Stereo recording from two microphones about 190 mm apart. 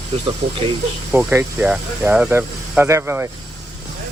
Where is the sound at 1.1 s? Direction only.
10° right (ahead or behind).